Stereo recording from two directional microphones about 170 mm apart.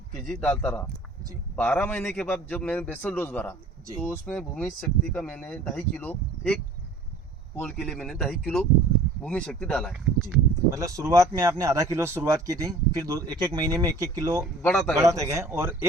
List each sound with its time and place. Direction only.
0.3 s a man's voice: 5° left (ahead or behind)
10.8 s speech: 20° right (ahead or behind)
14.6 s a man's voice: 5° left (ahead or behind)
14.9 s speech: 20° right (ahead or behind)